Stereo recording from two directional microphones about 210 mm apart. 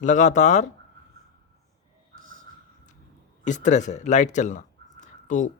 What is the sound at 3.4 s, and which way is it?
Speech, 35° left (ahead or behind).